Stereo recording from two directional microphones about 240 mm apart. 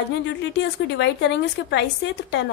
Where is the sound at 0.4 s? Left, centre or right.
Left.